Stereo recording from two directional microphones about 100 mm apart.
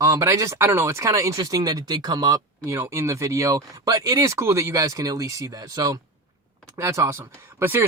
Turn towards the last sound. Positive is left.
turn(degrees=-25)  # may be behind; listen again after turning